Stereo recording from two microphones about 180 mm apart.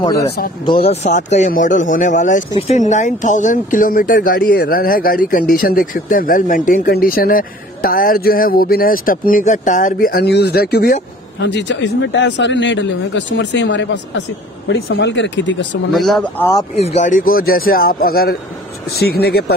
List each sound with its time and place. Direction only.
0.0 s speech: 15° left (ahead or behind)
0.8 s speech: 40° left (ahead or behind); by 15.8 s 80° left
15.9 s speech: centre (ahead or behind)
16.7 s speech: 40° left (ahead or behind); by 19.5 s 60° left (ahead or behind)